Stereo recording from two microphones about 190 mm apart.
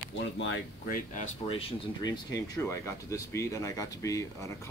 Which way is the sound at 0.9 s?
40° left (ahead or behind).